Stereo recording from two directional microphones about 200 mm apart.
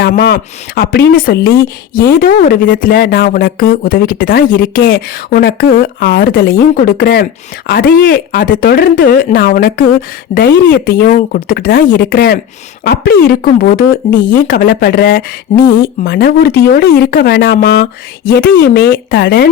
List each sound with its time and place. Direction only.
0.2 s speech: 50° left (ahead or behind)